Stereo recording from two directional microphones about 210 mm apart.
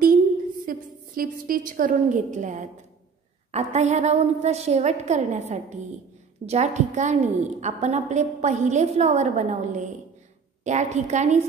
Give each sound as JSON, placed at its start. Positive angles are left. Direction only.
{"t": 0.7, "sound": "a woman's voice", "side_deg": -40}